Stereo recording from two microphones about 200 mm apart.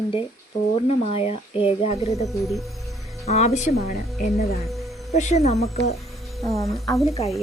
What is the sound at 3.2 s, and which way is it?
Speech, 35° left (ahead or behind).